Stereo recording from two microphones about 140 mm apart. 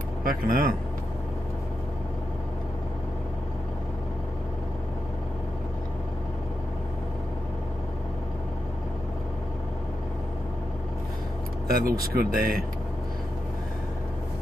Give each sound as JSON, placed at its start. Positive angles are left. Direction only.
{"t": 0.2, "sound": "speech", "side_deg": -90}
{"t": 11.6, "sound": "speech", "side_deg": -90}